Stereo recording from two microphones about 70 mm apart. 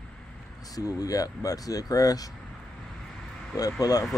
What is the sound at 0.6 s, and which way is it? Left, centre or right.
Speech, left.